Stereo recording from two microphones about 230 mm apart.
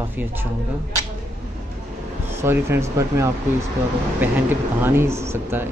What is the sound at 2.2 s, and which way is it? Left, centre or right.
Speech, centre.